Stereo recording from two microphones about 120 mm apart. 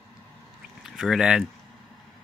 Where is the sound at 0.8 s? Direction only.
5° right (ahead or behind).